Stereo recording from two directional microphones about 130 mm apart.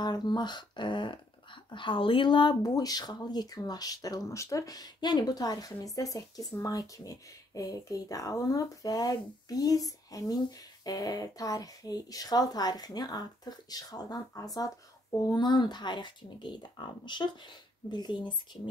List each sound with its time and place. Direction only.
0.0 s speech: 35° left (ahead or behind)